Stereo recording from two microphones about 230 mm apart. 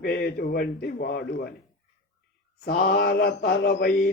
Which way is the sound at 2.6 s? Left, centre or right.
Left.